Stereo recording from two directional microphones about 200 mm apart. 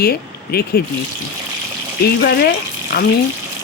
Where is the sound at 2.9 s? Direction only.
50° left (ahead or behind).